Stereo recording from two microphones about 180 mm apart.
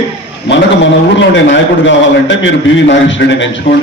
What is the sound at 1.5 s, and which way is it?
A man's voice, 90° left.